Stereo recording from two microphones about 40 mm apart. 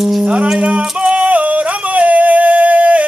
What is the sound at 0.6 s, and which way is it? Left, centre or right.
Yodeling, right.